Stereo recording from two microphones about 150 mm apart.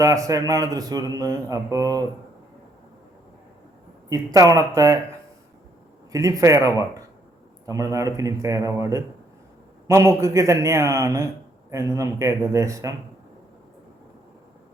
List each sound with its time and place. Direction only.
0.0 s speech: 20° right (ahead or behind)
4.1 s speech: 25° right (ahead or behind)
6.1 s speech: 20° right (ahead or behind)